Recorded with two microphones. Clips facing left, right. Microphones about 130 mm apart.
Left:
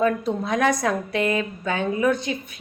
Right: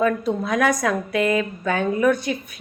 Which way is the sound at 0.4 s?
25° left (ahead or behind).